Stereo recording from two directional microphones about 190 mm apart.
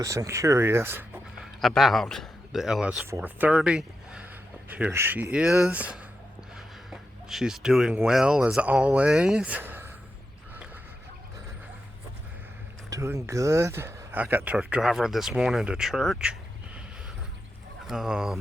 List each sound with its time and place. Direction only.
0.0 s speech: 15° right (ahead or behind)
1.6 s speech: centre (ahead or behind)
12.9 s speech: 15° right (ahead or behind)
17.8 s speech: 5° right (ahead or behind)